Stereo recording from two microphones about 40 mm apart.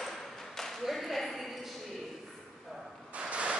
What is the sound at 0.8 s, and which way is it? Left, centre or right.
Speech, centre.